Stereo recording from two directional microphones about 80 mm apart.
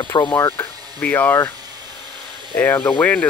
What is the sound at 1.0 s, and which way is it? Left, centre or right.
Speech, left.